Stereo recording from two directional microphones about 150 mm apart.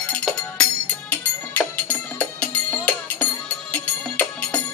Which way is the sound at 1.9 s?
10° left (ahead or behind).